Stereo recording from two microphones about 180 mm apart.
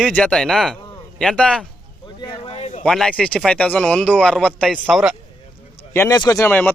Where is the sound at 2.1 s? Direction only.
30° left (ahead or behind).